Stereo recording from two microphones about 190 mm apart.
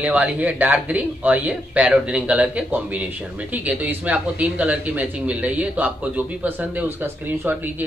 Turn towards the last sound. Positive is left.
turn(degrees=-10)  # may be behind; listen again after turning